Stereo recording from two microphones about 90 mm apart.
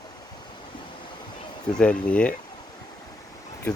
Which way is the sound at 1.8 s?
15° left (ahead or behind).